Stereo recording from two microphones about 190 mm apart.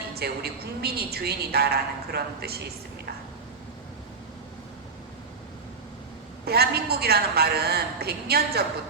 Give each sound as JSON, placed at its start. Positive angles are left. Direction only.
{"t": 0.1, "sound": "a woman's voice", "side_deg": -55}
{"t": 6.4, "sound": "a woman's voice", "side_deg": -55}